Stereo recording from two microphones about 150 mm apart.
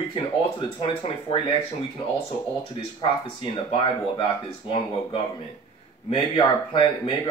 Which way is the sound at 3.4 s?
35° left (ahead or behind).